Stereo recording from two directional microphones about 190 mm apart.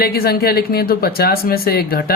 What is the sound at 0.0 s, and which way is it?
Speech, 55° left (ahead or behind).